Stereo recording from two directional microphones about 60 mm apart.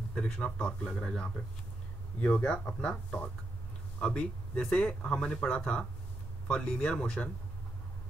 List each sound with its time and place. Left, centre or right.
0.2 s speech: centre